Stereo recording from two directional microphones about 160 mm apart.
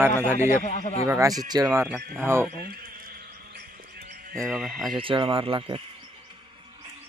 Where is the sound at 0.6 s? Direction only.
50° left (ahead or behind).